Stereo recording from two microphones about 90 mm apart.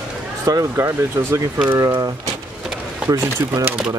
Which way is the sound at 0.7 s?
30° right (ahead or behind).